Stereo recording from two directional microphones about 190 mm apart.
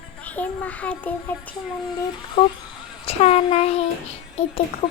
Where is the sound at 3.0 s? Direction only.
30° left (ahead or behind).